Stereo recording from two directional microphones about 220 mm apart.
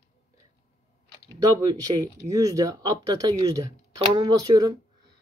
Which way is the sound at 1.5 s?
15° right (ahead or behind).